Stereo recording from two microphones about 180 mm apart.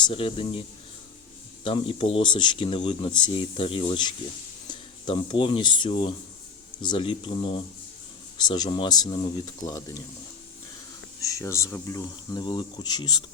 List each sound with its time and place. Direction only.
0.0 s speech: 30° left (ahead or behind)
1.6 s speech: 30° left (ahead or behind)
11.2 s speech: 15° left (ahead or behind)